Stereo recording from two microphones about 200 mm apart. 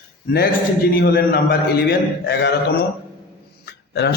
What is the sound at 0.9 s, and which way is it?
A man's voice, 50° left (ahead or behind).